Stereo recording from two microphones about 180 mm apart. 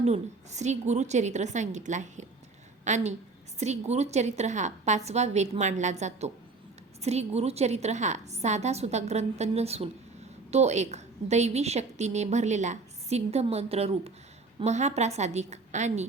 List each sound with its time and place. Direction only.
0.0 s a woman's voice: 40° right (ahead or behind)